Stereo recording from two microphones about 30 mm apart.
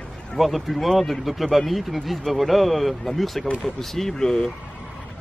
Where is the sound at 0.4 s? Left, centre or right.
Centre.